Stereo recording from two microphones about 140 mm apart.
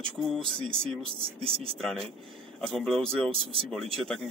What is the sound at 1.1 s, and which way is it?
Speech, 40° right (ahead or behind).